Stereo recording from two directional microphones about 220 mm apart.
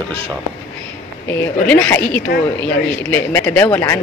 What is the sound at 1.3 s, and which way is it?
Speech, 10° left (ahead or behind).